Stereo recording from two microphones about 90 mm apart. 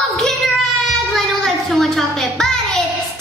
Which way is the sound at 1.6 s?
5° left (ahead or behind).